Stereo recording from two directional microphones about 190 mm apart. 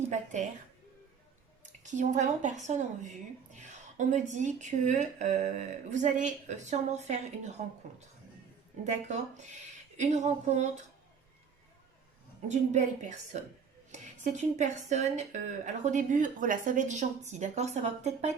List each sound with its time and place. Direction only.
0.1 s a sound: 40° right (ahead or behind)
1.8 s speech: 40° right (ahead or behind)
8.9 s speech: 40° right (ahead or behind)
12.5 s speech: 40° right (ahead or behind)